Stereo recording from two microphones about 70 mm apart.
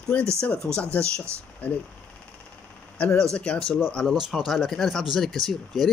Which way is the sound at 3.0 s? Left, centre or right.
Centre.